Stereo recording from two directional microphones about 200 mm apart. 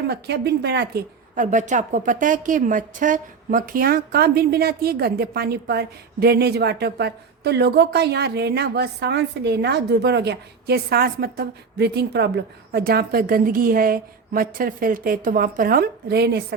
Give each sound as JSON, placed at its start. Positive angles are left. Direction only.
{"t": 0.1, "sound": "a woman's voice", "side_deg": -55}
{"t": 1.5, "sound": "speech", "side_deg": -40}